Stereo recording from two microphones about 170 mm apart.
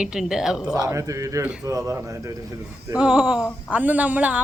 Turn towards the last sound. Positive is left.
turn(degrees=-10)  # may be behind; listen again after turning